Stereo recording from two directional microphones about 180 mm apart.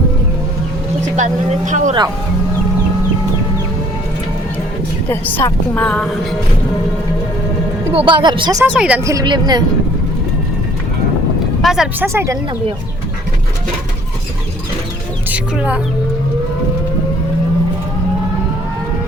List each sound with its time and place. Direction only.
1.0 s speech: 40° right (ahead or behind)
5.0 s a woman's voice: 15° left (ahead or behind)
7.9 s a woman's voice: 25° right (ahead or behind)
8.6 s a woman's voice: 5° right (ahead or behind)
9.0 s a woman's voice: 20° right (ahead or behind)
11.6 s speech: 5° right (ahead or behind)
12.0 s a woman's voice: 15° right (ahead or behind)
15.3 s speech: 10° right (ahead or behind)